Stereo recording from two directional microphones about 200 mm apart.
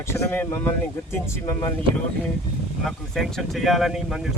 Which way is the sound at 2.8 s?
Centre (ahead or behind).